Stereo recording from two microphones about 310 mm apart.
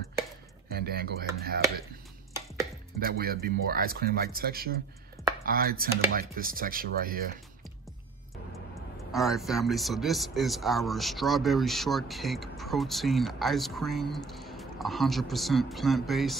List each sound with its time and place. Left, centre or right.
0.7 s speech: right
3.0 s speech: right
9.1 s speech: centre